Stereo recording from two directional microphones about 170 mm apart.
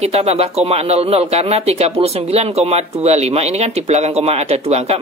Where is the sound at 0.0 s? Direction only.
35° right (ahead or behind).